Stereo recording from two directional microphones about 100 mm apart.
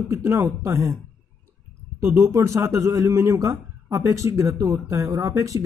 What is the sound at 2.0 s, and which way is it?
A man's voice, 25° right (ahead or behind).